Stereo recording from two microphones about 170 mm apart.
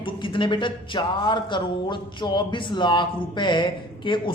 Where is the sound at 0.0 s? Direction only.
30° left (ahead or behind).